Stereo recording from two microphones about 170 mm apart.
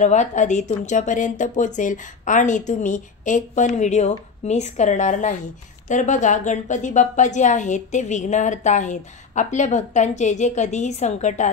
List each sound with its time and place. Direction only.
0.0 s a woman's voice: 45° left (ahead or behind)